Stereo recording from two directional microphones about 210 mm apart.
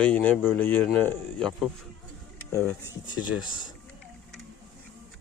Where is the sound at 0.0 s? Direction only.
5° left (ahead or behind).